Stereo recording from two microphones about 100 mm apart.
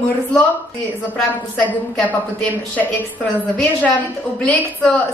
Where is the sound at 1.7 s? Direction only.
15° left (ahead or behind).